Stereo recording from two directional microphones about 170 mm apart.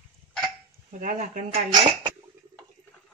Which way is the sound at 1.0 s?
50° right (ahead or behind).